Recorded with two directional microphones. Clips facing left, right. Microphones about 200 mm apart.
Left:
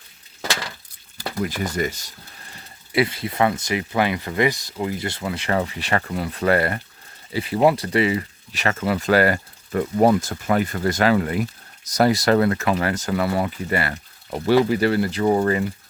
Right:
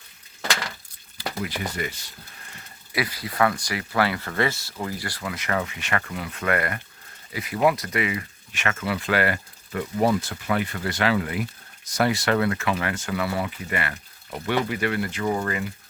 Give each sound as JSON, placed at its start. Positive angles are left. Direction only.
{"t": 1.5, "sound": "speech", "side_deg": 45}
{"t": 2.9, "sound": "speech", "side_deg": 25}